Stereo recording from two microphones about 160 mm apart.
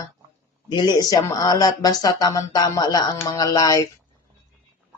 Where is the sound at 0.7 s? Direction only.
25° left (ahead or behind).